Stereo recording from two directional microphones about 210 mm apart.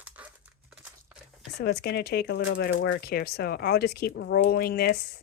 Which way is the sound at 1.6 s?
50° left (ahead or behind).